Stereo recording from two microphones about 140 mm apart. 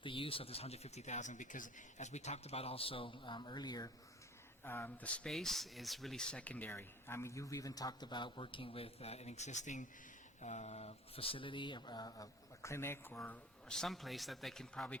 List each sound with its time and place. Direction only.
0.0 s speech: 40° left (ahead or behind)
4.6 s speech: 15° left (ahead or behind)